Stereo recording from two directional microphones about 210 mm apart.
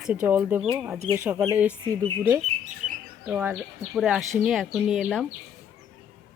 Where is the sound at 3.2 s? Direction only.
5° right (ahead or behind).